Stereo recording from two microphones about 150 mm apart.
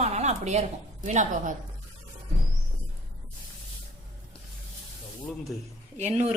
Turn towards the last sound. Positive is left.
turn(degrees=-50)  # may be behind; listen again after turning